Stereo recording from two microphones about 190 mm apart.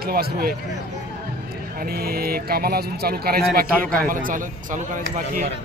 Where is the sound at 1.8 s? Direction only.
55° right (ahead or behind).